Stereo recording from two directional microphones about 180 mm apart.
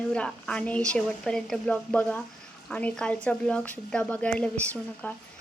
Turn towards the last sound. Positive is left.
turn(degrees=5)  # may be behind; listen again after turning